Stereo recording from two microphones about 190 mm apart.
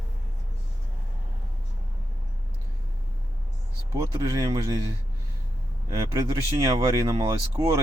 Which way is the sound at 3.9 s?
20° right (ahead or behind).